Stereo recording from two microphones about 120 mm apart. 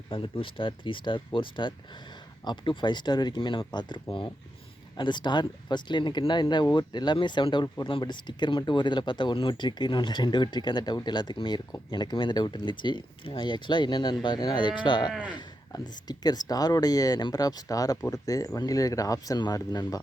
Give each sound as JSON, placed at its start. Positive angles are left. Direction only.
{"t": 0.1, "sound": "speech", "side_deg": 45}
{"t": 15.1, "sound": "speech", "side_deg": -10}
{"t": 15.4, "sound": "speech", "side_deg": 35}